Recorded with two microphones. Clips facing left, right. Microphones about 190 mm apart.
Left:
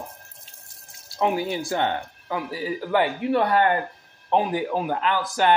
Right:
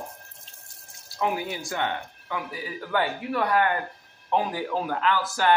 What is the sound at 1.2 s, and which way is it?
Speech, 25° left (ahead or behind).